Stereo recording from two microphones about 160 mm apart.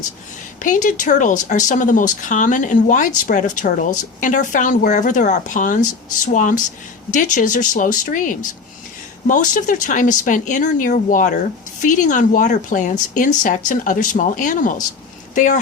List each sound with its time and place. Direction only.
0.6 s speech: 50° left (ahead or behind)